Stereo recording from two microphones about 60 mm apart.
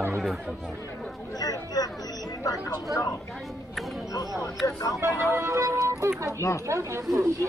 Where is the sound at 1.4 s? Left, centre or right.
Left.